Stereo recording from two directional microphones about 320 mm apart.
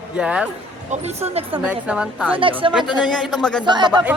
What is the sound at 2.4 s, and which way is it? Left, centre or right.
Speech, centre.